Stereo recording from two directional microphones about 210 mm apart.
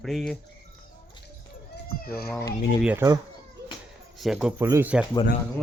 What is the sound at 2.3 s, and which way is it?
Speech, 15° left (ahead or behind).